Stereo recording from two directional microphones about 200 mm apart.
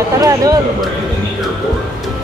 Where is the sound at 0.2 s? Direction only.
20° right (ahead or behind).